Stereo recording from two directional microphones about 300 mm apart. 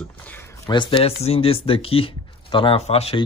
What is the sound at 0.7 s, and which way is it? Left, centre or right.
Speech, centre.